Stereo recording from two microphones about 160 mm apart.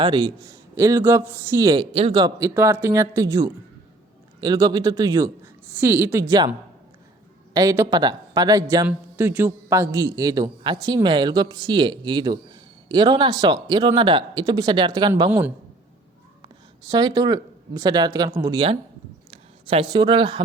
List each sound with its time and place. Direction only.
0.0 s a man's voice: 30° right (ahead or behind)
7.5 s a man's voice: 20° right (ahead or behind)
8.9 s a man's voice: 10° right (ahead or behind); by 15.1 s 30° right (ahead or behind)
15.3 s a woman's voice: 10° right (ahead or behind)
16.9 s a man's voice: 25° right (ahead or behind)
19.3 s speech: 35° right (ahead or behind)